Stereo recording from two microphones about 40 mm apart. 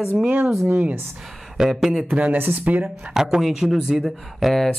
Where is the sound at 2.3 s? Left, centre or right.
Right.